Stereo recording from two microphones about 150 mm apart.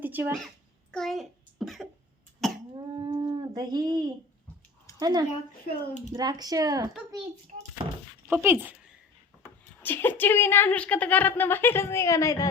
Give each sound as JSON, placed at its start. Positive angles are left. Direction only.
{"t": 0.0, "sound": "a sound", "side_deg": -10}
{"t": 0.4, "sound": "a child's voice", "side_deg": 5}
{"t": 2.4, "sound": "cough", "side_deg": 0}
{"t": 2.7, "sound": "a sound", "side_deg": -30}
{"t": 3.5, "sound": "speech", "side_deg": -25}
{"t": 7.8, "sound": "speech", "side_deg": -35}
{"t": 8.3, "sound": "speech", "side_deg": -15}
{"t": 9.8, "sound": "a woman's voice", "side_deg": 15}